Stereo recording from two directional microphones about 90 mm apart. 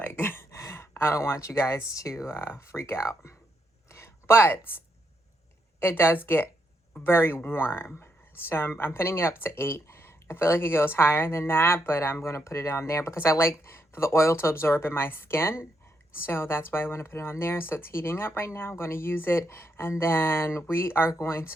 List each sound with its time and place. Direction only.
0.0 s speech: 25° left (ahead or behind)
3.8 s a sound: 30° left (ahead or behind)
5.8 s speech: 25° left (ahead or behind)